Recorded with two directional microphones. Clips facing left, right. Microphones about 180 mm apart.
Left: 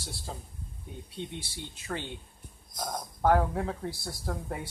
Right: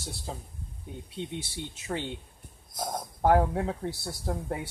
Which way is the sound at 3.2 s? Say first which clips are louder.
Right 2 dB; 20° right (ahead or behind).